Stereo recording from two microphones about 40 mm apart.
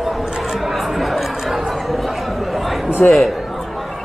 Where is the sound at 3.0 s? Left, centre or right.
Left.